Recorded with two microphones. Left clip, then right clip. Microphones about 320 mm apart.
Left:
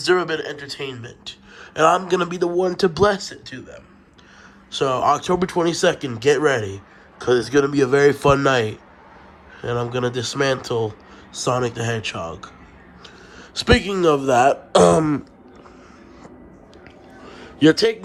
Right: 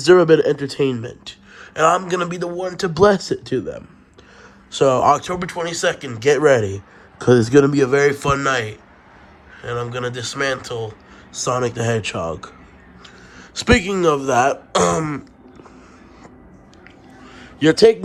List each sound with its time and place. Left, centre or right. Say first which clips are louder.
0.0 s speech: right 8 dB; centre
13.7 s speech: right 1 dB; centre
17.2 s a sound: left 1 dB; centre